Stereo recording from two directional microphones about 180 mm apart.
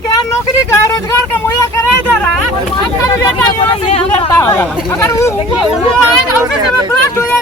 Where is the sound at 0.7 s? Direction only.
15° left (ahead or behind).